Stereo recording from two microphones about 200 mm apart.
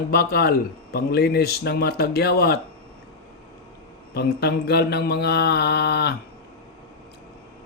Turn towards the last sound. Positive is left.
turn(degrees=55)  # may be behind; listen again after turning